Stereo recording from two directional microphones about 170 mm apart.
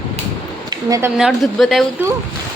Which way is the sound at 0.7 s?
20° right (ahead or behind).